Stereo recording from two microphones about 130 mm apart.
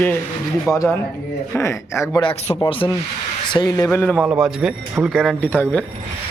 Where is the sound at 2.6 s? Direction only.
40° left (ahead or behind).